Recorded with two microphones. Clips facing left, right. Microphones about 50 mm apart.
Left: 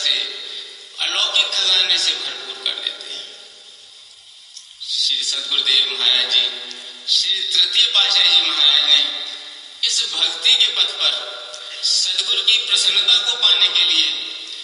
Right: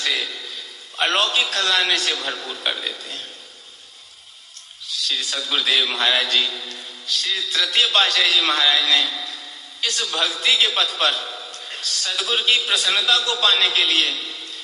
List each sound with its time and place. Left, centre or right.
0.0 s a sound: right
0.9 s a man's voice: right
4.9 s a man's voice: right